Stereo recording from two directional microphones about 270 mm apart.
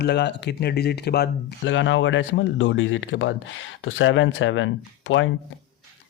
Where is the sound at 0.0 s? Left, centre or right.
Left.